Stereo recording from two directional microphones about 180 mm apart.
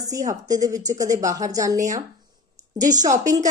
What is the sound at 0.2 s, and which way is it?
A woman's voice, 20° right (ahead or behind).